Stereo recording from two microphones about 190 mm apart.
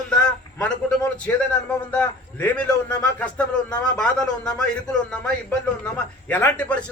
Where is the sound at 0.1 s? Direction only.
5° left (ahead or behind).